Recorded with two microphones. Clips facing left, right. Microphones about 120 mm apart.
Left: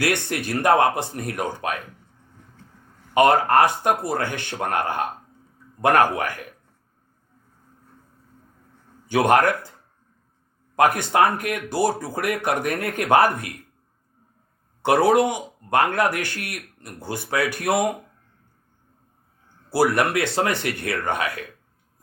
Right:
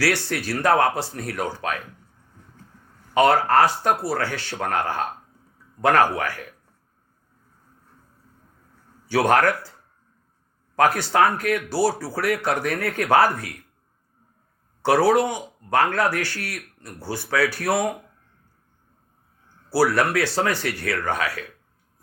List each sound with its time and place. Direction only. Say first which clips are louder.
0.0 s speech: even; 20° left (ahead or behind)
3.2 s speech: left 1 dB; 15° left (ahead or behind)
9.0 s speech: left 1 dB; 20° left (ahead or behind)
10.8 s speech: left 1 dB; 20° left (ahead or behind)
14.8 s a man's voice: left 1 dB; 20° left (ahead or behind)
19.7 s speech: even; 20° left (ahead or behind)